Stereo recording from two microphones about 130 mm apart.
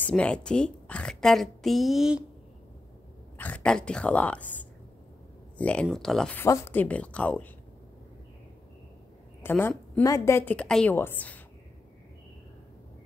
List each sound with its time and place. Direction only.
0.0 s a woman's voice: 10° left (ahead or behind)
3.3 s a woman's voice: 10° left (ahead or behind)
6.3 s a woman's voice: 20° left (ahead or behind)
9.4 s a woman's voice: 15° left (ahead or behind)